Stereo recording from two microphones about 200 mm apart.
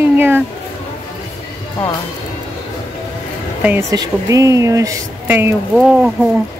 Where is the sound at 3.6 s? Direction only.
15° right (ahead or behind).